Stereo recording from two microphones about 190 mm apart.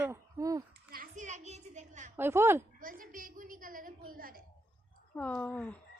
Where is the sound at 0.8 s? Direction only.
45° right (ahead or behind).